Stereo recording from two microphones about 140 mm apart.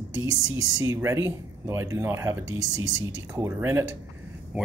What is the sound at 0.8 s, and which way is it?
Speech, 20° right (ahead or behind).